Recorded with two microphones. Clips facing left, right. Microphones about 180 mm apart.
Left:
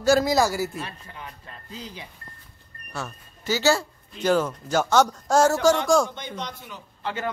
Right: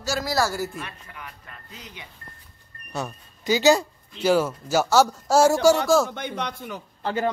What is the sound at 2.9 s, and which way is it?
Speech, 15° right (ahead or behind).